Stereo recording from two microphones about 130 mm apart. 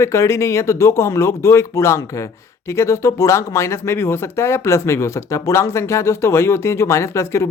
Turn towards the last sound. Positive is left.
turn(degrees=20)  # may be behind; listen again after turning